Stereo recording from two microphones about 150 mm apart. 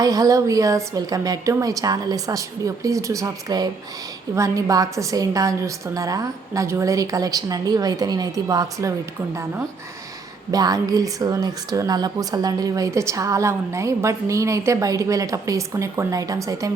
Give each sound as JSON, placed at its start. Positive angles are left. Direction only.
{"t": 0.0, "sound": "speech", "side_deg": -25}
{"t": 10.5, "sound": "speech", "side_deg": -25}